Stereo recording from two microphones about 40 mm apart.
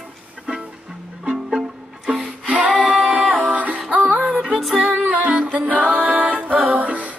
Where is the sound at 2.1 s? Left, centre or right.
Right.